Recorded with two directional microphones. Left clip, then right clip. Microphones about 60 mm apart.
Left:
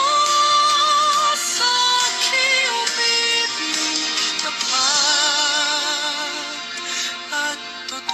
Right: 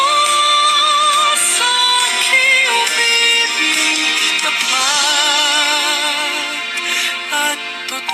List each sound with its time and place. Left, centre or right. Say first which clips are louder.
0.0 s music: right 4 dB; right